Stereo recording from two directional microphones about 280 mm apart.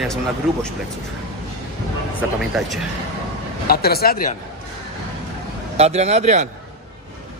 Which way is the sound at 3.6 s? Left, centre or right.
Left.